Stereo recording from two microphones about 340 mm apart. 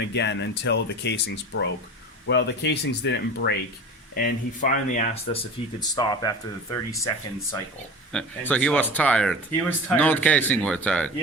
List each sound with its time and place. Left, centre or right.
0.1 s speech: left; by 11.1 s centre